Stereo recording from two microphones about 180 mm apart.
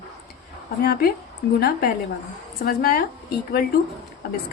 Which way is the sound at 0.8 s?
55° left (ahead or behind).